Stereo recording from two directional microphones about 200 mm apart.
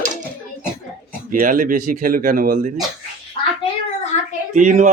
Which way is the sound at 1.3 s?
40° right (ahead or behind).